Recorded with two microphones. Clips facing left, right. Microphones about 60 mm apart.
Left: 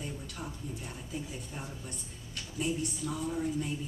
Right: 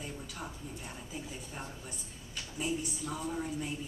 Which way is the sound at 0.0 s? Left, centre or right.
Centre.